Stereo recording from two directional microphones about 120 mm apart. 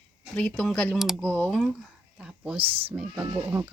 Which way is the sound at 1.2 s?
10° left (ahead or behind).